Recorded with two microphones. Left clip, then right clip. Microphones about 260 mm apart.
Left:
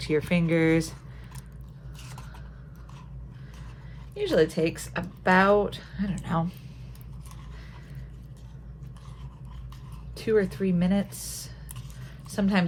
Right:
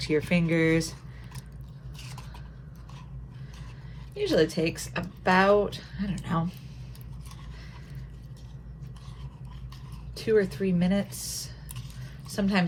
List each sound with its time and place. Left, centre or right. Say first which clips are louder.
0.0 s speech: even; left
2.0 s a sound: right 1 dB; centre
4.1 s speech: left 1 dB; left
10.2 s speech: even; left
12.3 s speech: left 1 dB; left